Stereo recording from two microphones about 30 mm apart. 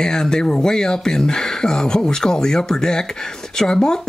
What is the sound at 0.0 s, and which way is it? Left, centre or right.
Speech, left.